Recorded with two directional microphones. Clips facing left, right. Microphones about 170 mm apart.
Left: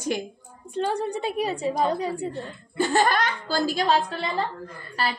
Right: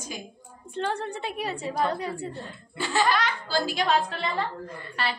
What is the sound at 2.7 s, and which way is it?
Speech, 50° left (ahead or behind).